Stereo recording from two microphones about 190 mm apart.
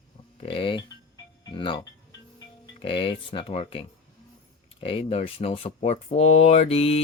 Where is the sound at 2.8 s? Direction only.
30° left (ahead or behind).